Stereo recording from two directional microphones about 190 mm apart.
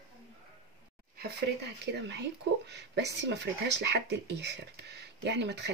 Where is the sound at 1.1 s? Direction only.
60° right (ahead or behind).